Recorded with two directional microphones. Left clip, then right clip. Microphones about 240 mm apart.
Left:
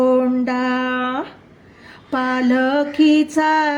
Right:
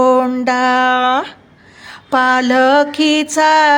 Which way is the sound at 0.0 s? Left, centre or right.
Right.